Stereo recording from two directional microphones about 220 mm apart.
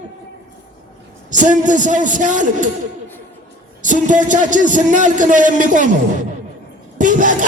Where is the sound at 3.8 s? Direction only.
35° right (ahead or behind).